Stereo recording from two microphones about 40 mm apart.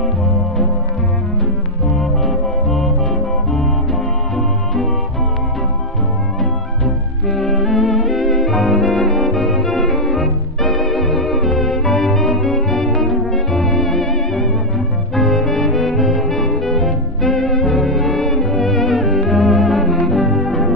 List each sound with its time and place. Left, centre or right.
2.0 s music: centre
7.2 s music: centre